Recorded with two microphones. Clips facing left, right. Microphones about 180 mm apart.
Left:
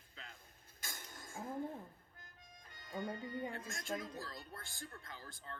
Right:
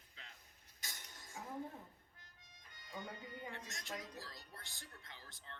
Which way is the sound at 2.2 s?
50° left (ahead or behind).